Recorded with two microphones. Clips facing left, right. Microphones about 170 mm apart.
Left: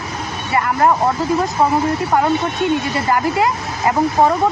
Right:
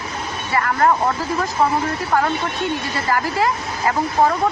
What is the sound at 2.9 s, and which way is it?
Speech, 25° left (ahead or behind).